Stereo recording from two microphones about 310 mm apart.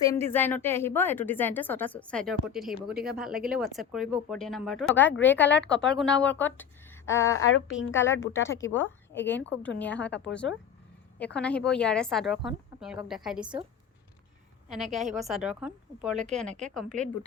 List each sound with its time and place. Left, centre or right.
0.0 s a woman's voice: centre
7.3 s a woman's voice: left
9.1 s a woman's voice: centre
11.3 s speech: centre
14.7 s speech: centre